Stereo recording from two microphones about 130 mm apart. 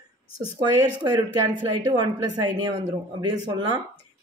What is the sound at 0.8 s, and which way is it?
Speech, 35° right (ahead or behind).